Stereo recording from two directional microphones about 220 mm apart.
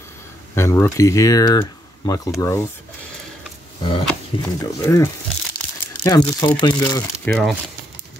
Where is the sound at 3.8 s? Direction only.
25° left (ahead or behind).